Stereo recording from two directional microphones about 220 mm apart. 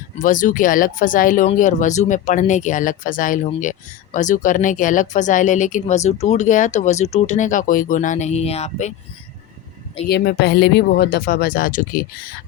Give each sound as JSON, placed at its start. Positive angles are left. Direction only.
{"t": 0.2, "sound": "speech", "side_deg": 35}
{"t": 10.1, "sound": "speech", "side_deg": 50}